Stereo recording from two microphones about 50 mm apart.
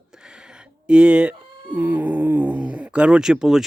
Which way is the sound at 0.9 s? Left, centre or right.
Right.